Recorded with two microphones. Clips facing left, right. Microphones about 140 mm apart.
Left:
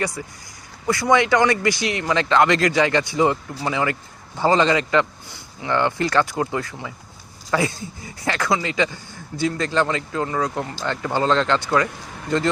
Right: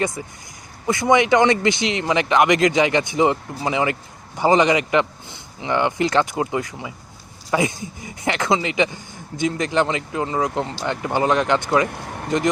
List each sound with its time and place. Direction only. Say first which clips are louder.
0.0 s speech: right 2 dB; 20° right (ahead or behind)
11.9 s speech: right 5 dB; 60° right (ahead or behind)